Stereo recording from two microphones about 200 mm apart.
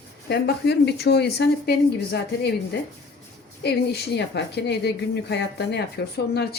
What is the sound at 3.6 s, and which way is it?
A woman's voice, 55° left (ahead or behind).